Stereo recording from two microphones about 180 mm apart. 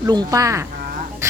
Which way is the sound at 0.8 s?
50° right (ahead or behind).